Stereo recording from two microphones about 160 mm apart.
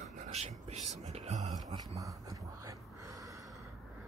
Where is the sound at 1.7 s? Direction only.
20° right (ahead or behind).